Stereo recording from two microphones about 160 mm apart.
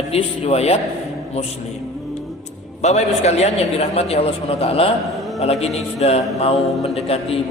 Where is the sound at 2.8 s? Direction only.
45° left (ahead or behind).